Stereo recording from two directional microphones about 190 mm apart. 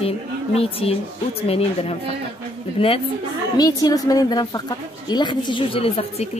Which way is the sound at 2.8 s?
30° left (ahead or behind).